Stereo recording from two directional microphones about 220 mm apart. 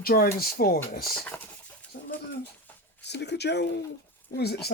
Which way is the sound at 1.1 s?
Centre (ahead or behind).